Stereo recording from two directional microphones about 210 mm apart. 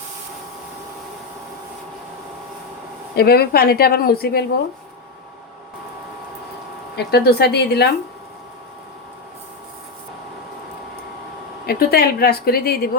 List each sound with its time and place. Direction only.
3.2 s a woman's voice: 45° left (ahead or behind)
6.9 s a woman's voice: 50° left (ahead or behind)
11.6 s a woman's voice: 45° left (ahead or behind)